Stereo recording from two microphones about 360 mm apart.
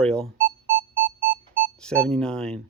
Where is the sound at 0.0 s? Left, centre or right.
Centre.